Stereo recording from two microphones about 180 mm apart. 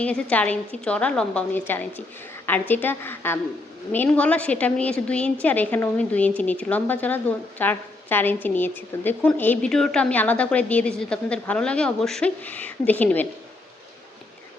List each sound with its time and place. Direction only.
0.0 s a woman's voice: 5° left (ahead or behind)